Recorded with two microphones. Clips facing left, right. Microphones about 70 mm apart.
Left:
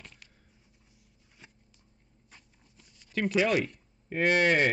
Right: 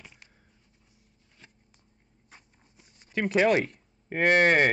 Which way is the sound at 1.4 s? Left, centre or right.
Centre.